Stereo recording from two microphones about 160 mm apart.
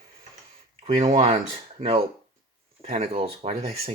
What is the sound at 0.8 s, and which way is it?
Speech, 40° right (ahead or behind).